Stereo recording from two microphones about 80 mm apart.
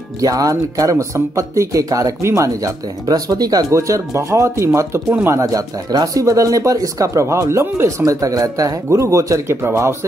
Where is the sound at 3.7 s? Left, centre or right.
Right.